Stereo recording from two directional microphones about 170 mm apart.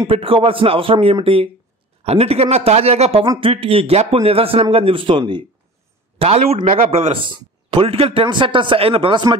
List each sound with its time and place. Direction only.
0.0 s speech: 35° right (ahead or behind)